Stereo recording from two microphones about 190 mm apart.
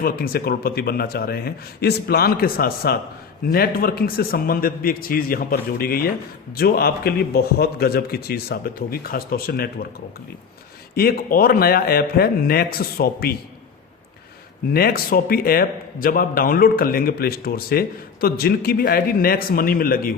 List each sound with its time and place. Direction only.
0.0 s a man's voice: 55° left (ahead or behind)
10.9 s a man's voice: 50° left (ahead or behind)
14.7 s a man's voice: 55° left (ahead or behind)